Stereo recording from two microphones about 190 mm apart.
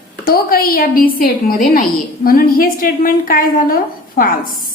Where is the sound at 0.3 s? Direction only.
50° left (ahead or behind).